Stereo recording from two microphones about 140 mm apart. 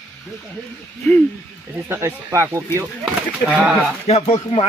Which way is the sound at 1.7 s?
15° right (ahead or behind).